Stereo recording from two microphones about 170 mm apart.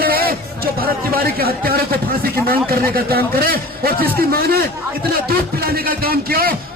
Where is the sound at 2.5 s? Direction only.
60° right (ahead or behind).